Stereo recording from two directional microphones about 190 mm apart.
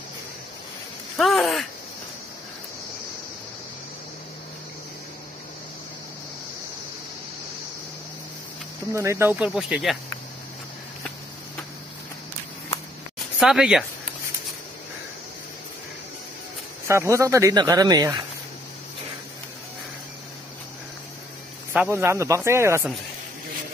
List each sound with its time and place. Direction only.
1.1 s speech: centre (ahead or behind)
8.9 s speech: 15° right (ahead or behind)
9.5 s speech: centre (ahead or behind)
13.4 s speech: 5° right (ahead or behind)
16.8 s speech: 15° right (ahead or behind)
21.7 s speech: 10° right (ahead or behind)